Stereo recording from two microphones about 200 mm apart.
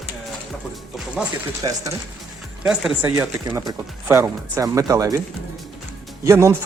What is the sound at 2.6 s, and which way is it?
Speech, 5° right (ahead or behind).